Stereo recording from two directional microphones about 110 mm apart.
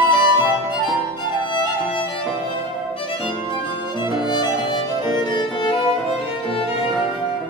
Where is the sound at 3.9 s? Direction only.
45° left (ahead or behind).